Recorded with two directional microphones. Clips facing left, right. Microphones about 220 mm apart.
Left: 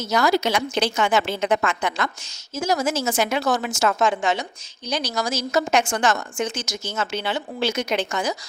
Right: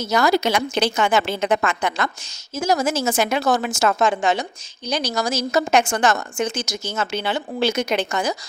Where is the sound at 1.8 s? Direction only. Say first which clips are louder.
Right 2 dB; 40° right (ahead or behind).